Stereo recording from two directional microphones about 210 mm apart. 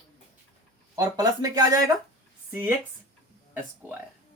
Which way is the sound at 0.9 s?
15° right (ahead or behind).